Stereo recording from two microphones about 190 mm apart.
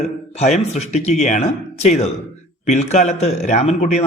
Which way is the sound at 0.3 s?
35° left (ahead or behind).